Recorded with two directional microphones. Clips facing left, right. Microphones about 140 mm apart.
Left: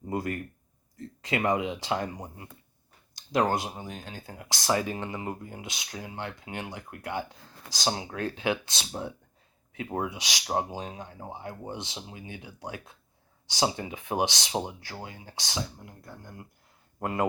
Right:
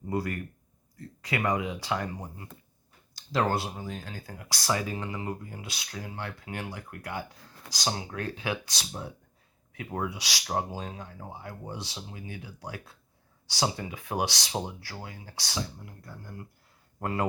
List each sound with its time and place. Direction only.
0.1 s speech: 20° left (ahead or behind)